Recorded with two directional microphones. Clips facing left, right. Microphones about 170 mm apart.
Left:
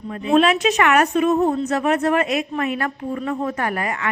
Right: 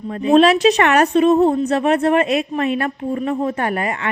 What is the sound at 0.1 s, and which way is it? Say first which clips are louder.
A woman's voice: right 4 dB; 35° right (ahead or behind).